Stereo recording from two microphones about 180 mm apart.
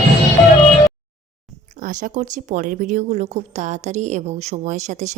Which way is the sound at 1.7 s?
45° right (ahead or behind).